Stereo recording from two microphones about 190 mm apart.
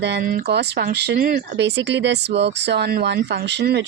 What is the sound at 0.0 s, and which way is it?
Speech, 60° right (ahead or behind).